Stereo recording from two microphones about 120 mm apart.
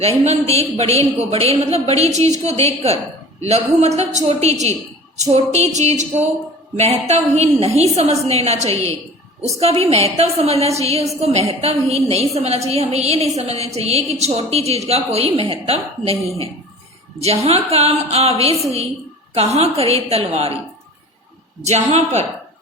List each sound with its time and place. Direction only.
0.3 s a woman's voice: 60° right (ahead or behind)
5.7 s a woman's voice: 70° right (ahead or behind)
21.6 s a woman's voice: 70° right (ahead or behind)